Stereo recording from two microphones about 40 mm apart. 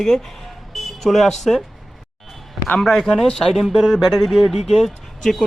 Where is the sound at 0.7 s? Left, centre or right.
Centre.